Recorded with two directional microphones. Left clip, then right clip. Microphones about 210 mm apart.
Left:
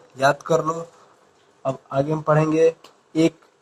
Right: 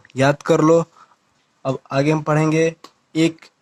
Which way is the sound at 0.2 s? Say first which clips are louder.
Right 3 dB; 30° right (ahead or behind).